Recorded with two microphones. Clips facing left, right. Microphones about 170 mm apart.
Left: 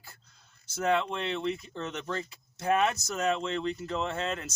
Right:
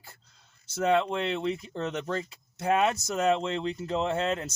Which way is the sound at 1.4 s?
35° right (ahead or behind).